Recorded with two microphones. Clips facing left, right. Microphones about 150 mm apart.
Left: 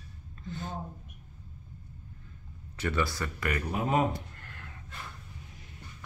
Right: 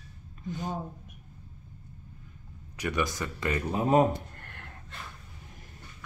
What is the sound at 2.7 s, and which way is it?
Speech, 15° right (ahead or behind).